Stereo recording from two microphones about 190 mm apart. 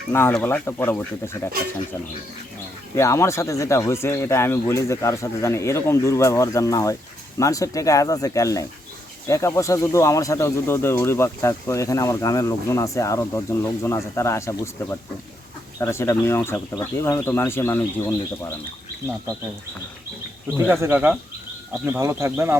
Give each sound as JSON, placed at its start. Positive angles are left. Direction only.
{"t": 0.1, "sound": "speech", "side_deg": 10}
{"t": 2.9, "sound": "speech", "side_deg": 15}
{"t": 20.8, "sound": "speech", "side_deg": -10}